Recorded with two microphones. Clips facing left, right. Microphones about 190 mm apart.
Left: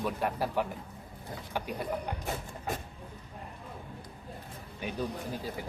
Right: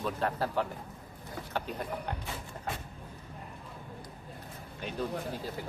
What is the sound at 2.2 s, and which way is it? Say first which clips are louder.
Music: left 3 dB; 45° left (ahead or behind).